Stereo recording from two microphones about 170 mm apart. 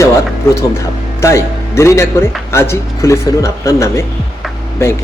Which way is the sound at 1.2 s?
15° left (ahead or behind).